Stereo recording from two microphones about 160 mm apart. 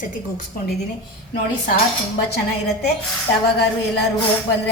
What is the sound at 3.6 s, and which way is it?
Speech, 90° left.